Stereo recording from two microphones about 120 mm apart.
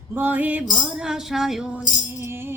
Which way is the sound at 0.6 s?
5° right (ahead or behind).